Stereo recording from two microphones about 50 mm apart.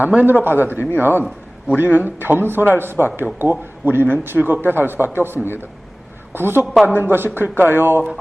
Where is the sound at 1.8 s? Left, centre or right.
Right.